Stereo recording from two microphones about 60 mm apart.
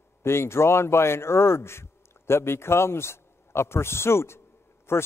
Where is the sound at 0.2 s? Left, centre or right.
Left.